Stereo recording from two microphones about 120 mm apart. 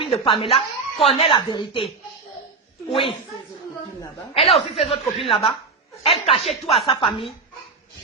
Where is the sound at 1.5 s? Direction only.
45° left (ahead or behind).